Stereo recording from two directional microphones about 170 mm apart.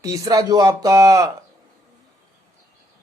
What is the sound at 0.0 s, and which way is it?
Speech, 20° right (ahead or behind).